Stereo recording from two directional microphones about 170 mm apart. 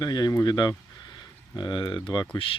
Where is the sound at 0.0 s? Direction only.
25° left (ahead or behind).